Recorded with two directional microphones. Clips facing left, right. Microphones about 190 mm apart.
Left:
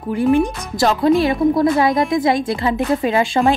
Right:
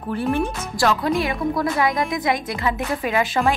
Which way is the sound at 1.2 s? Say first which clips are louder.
Left 8 dB; 30° left (ahead or behind).